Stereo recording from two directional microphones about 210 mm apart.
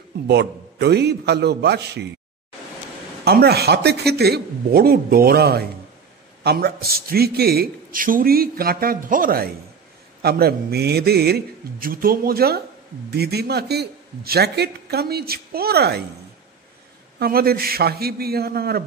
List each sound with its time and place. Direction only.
0.3 s a man's voice: 55° right (ahead or behind)
3.3 s a man's voice: 50° right (ahead or behind)
17.2 s a man's voice: 45° right (ahead or behind)